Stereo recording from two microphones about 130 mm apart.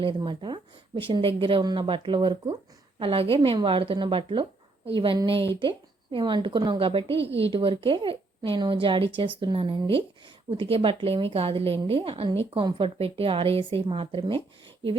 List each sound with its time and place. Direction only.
0.0 s a woman's voice: 40° right (ahead or behind)